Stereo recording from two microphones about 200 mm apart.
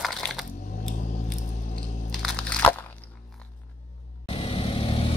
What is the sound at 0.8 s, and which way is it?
Scissors, 40° left (ahead or behind).